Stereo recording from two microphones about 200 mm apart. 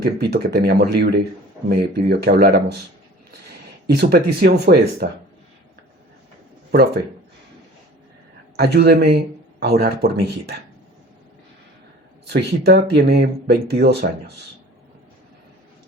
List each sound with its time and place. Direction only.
0.0 s speech: 55° right (ahead or behind)
3.8 s speech: 50° right (ahead or behind)
8.5 s speech: 55° right (ahead or behind)
12.3 s speech: 60° right (ahead or behind)